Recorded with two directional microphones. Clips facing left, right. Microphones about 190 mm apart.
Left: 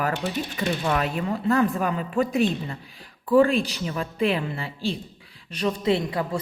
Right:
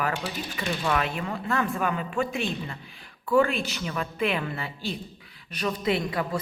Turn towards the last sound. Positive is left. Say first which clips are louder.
# left 3 dB
turn(degrees=25)  # may be behind; listen again after turning